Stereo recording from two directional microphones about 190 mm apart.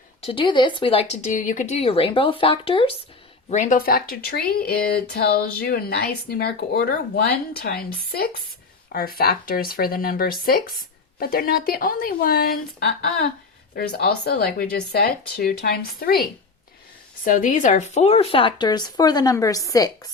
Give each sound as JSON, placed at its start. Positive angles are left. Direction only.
{"t": 0.3, "sound": "speech", "side_deg": 25}
{"t": 3.5, "sound": "speech", "side_deg": 40}
{"t": 17.2, "sound": "speech", "side_deg": 45}